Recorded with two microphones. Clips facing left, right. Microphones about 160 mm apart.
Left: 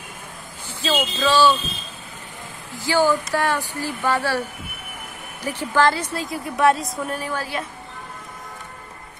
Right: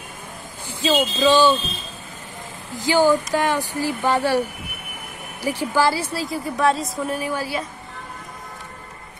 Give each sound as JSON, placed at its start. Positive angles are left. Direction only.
{"t": 0.7, "sound": "speech", "side_deg": -15}
{"t": 2.8, "sound": "a woman's voice", "side_deg": -15}
{"t": 7.2, "sound": "speech", "side_deg": -10}